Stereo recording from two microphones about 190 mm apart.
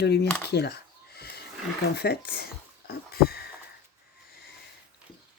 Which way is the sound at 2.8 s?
55° left (ahead or behind).